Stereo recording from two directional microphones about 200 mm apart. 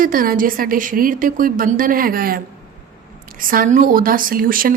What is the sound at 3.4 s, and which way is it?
Speech, 45° right (ahead or behind).